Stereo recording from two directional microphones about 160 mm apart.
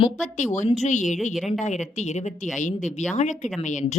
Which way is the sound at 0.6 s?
45° left (ahead or behind).